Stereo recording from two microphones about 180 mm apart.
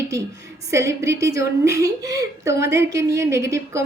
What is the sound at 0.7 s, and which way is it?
Speech, 15° right (ahead or behind).